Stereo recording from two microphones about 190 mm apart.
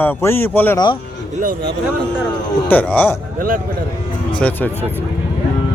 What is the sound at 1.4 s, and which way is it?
Speech, 45° right (ahead or behind).